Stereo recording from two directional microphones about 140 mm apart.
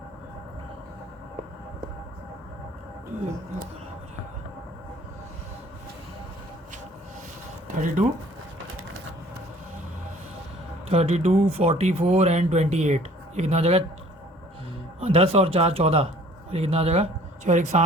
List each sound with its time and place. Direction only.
8.0 s speech: 65° right (ahead or behind)
10.8 s speech: 50° right (ahead or behind)
15.0 s speech: 45° right (ahead or behind)